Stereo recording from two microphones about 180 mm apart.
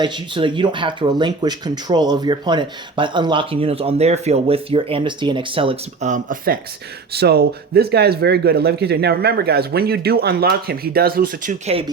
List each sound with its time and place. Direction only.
0.0 s speech: 25° right (ahead or behind)
6.1 s speech: 45° right (ahead or behind)
7.1 s speech: 60° right (ahead or behind)
11.6 s speech: 30° right (ahead or behind)